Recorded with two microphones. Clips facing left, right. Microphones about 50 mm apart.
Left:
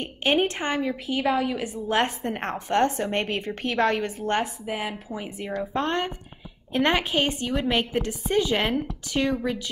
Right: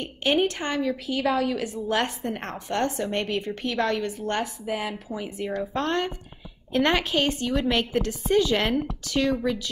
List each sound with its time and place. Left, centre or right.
0.0 s a woman's voice: left
4.4 s a woman's voice: centre